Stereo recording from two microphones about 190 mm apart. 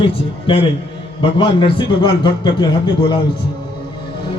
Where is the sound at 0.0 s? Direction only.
25° left (ahead or behind).